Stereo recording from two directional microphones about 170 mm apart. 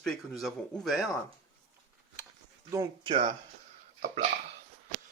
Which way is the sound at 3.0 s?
30° right (ahead or behind).